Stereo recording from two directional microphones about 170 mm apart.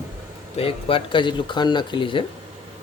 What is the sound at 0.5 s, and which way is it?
Speech, 35° left (ahead or behind).